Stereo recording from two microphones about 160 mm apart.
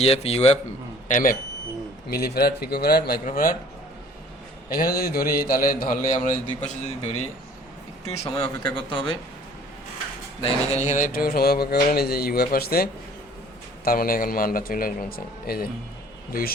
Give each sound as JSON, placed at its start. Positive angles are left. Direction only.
{"t": 0.0, "sound": "a man's voice", "side_deg": 40}
{"t": 1.0, "sound": "a man's voice", "side_deg": 55}
{"t": 2.0, "sound": "speech", "side_deg": 75}
{"t": 4.7, "sound": "a man's voice", "side_deg": 70}
{"t": 8.3, "sound": "a man's voice", "side_deg": 30}
{"t": 10.4, "sound": "a man's voice", "side_deg": 45}